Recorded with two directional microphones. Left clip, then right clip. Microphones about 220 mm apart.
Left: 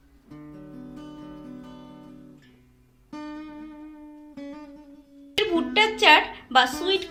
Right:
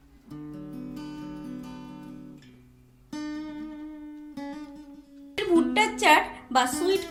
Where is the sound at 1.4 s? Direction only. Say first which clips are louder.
Right 2 dB; 35° right (ahead or behind).